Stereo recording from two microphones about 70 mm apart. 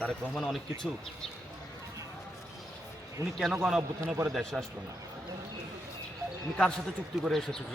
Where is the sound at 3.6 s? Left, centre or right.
Centre.